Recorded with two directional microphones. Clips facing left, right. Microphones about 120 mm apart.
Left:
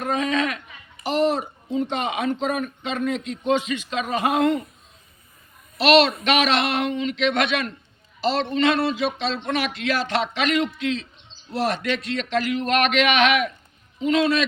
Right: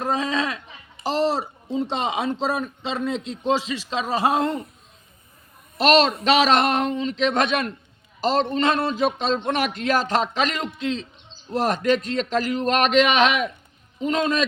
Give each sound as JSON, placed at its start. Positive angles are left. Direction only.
{"t": 0.0, "sound": "a sound", "side_deg": -30}
{"t": 1.0, "sound": "speech", "side_deg": -35}
{"t": 5.7, "sound": "a man's voice", "side_deg": -40}